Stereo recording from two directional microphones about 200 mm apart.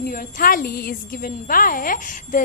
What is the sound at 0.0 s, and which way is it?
A woman's voice, 45° left (ahead or behind).